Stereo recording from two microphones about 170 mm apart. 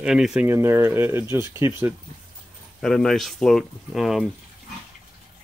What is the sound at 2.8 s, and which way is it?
Speech, 5° left (ahead or behind).